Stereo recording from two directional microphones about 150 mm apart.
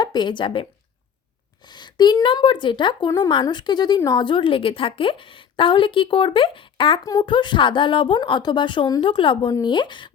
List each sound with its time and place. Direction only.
0.0 s a woman's voice: 30° left (ahead or behind)
7.0 s a woman's voice: 25° left (ahead or behind)